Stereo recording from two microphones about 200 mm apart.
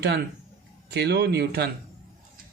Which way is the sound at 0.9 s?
55° right (ahead or behind).